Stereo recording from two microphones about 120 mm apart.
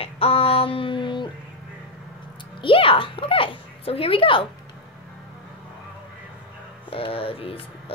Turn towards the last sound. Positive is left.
turn(degrees=50)  # may be behind; listen again after turning